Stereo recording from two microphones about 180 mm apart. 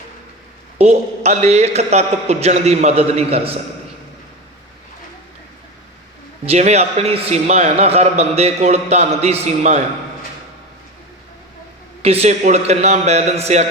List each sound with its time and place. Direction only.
0.8 s a man's voice: 40° right (ahead or behind)
6.4 s a man's voice: 35° right (ahead or behind)
12.0 s a man's voice: 35° right (ahead or behind)